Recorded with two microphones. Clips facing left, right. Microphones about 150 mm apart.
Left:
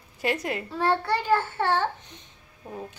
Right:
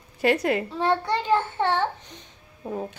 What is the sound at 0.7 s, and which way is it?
A child's voice, 20° right (ahead or behind).